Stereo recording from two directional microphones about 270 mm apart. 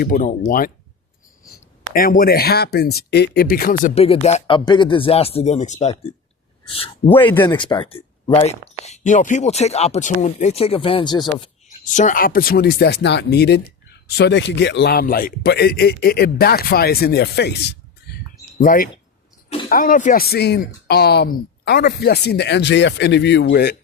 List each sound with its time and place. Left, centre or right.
0.0 s speech: left
1.9 s speech: left
7.1 s speech: centre
7.5 s speech: centre
11.9 s speech: left